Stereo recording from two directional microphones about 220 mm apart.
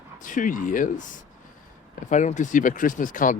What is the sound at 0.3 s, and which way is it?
Speech, 35° left (ahead or behind).